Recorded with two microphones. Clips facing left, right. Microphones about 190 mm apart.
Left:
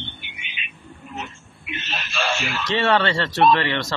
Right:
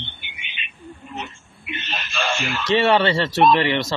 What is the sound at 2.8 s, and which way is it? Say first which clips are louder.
Speech: right 2 dB; 15° right (ahead or behind).